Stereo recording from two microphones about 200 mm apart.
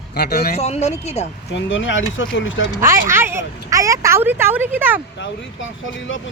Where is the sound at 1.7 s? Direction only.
70° left (ahead or behind).